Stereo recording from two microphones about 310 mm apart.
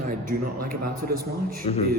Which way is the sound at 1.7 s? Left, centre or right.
Left.